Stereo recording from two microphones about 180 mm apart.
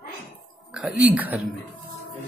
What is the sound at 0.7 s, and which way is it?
Speech, 5° right (ahead or behind).